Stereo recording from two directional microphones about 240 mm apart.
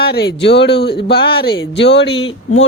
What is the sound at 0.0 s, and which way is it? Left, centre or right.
Speech, left.